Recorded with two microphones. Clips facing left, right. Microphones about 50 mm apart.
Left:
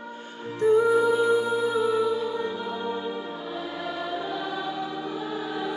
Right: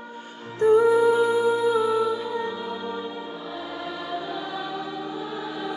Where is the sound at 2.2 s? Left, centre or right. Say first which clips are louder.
Even; centre.